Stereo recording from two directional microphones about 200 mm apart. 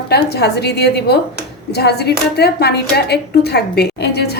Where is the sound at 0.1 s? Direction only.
55° left (ahead or behind).